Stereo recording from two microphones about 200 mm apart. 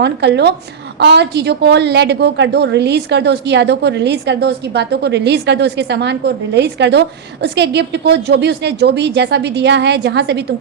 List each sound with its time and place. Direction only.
0.0 s a woman's voice: 60° right (ahead or behind)